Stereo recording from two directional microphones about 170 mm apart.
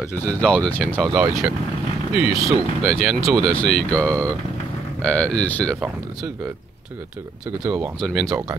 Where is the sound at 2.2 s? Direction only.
10° right (ahead or behind).